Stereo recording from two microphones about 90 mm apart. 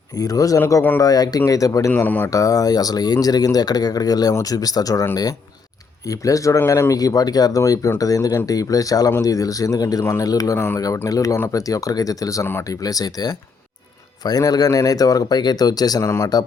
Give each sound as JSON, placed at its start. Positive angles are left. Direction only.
{"t": 0.2, "sound": "speech", "side_deg": 45}
{"t": 1.9, "sound": "speech", "side_deg": 20}
{"t": 2.3, "sound": "speech", "side_deg": 40}
{"t": 6.1, "sound": "speech", "side_deg": 40}
{"t": 10.0, "sound": "speech", "side_deg": 30}
{"t": 10.2, "sound": "speech", "side_deg": 40}
{"t": 16.0, "sound": "speech", "side_deg": 30}